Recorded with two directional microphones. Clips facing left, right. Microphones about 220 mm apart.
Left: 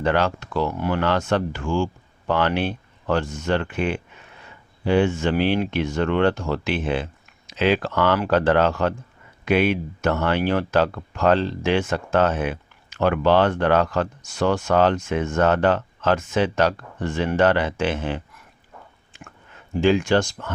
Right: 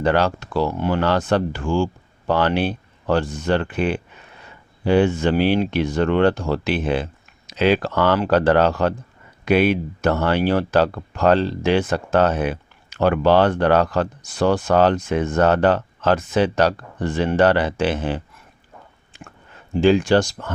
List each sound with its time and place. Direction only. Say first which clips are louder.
0.0 s speech: right 2 dB; 35° right (ahead or behind)
19.1 s a sound: right 3 dB; 35° right (ahead or behind)
19.8 s speech: right 3 dB; 35° right (ahead or behind)